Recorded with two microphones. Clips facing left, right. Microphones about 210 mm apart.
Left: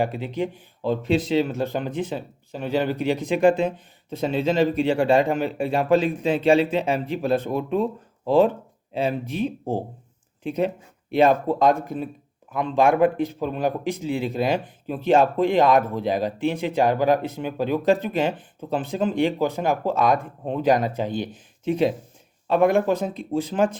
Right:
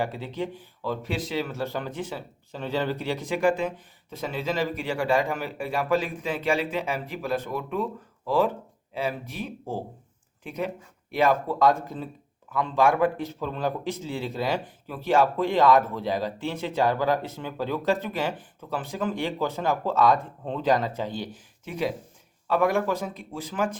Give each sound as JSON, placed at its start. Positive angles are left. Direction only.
{"t": 0.0, "sound": "a man's voice", "side_deg": 15}